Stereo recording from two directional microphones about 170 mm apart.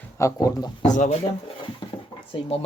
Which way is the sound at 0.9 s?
45° left (ahead or behind).